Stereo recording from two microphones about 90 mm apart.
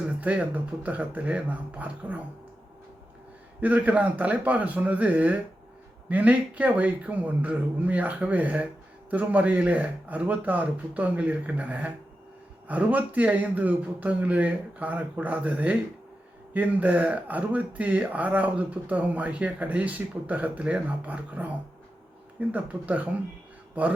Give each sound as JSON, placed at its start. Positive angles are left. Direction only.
{"t": 0.2, "sound": "speech", "side_deg": -15}
{"t": 3.6, "sound": "speech", "side_deg": -20}